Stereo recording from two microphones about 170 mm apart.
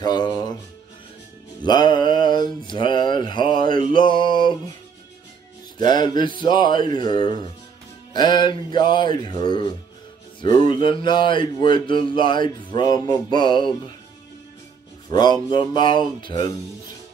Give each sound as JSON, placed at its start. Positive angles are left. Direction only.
{"t": 0.0, "sound": "speech", "side_deg": 25}
{"t": 1.6, "sound": "speech", "side_deg": 25}
{"t": 5.8, "sound": "speech", "side_deg": 25}
{"t": 15.0, "sound": "speech", "side_deg": 25}